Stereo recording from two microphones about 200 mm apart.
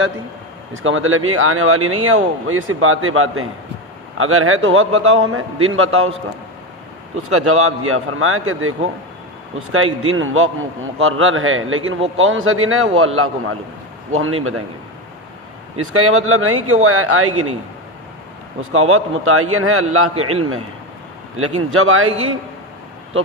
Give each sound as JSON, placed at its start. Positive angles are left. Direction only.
{"t": 0.9, "sound": "speech", "side_deg": -85}
{"t": 7.2, "sound": "speech", "side_deg": -90}
{"t": 15.8, "sound": "speech", "side_deg": -90}
{"t": 18.7, "sound": "speech", "side_deg": -90}